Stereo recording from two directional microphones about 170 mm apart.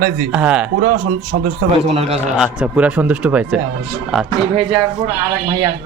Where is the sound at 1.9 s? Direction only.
35° right (ahead or behind).